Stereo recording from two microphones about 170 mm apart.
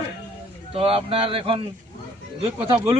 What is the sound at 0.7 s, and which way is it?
Speech, 35° right (ahead or behind).